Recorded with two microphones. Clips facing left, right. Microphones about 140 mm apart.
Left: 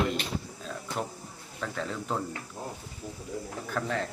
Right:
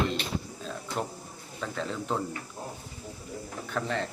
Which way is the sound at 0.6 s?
Centre (ahead or behind).